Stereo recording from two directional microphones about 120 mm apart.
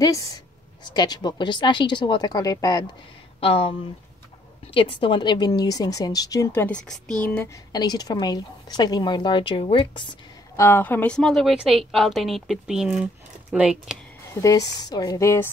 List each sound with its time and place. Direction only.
0.0 s a woman's voice: 30° left (ahead or behind)
3.3 s speech: 50° left (ahead or behind)
4.7 s a woman's voice: 45° left (ahead or behind); by 6.7 s 20° left (ahead or behind)
6.7 s a woman's voice: 5° left (ahead or behind)
7.2 s a woman's voice: 15° left (ahead or behind)
7.7 s a woman's voice: 35° left (ahead or behind)
10.5 s a woman's voice: 20° left (ahead or behind)
11.1 s speech: 5° left (ahead or behind)
14.4 s a woman's voice: 30° left (ahead or behind)